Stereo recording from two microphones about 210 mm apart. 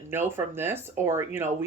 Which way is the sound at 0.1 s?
10° right (ahead or behind).